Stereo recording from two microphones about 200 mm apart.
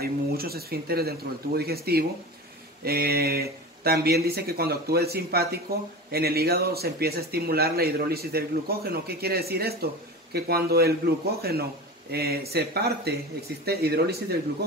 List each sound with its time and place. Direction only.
0.0 s speech: 50° right (ahead or behind)